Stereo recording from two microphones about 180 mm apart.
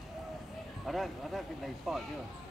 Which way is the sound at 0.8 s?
Centre (ahead or behind).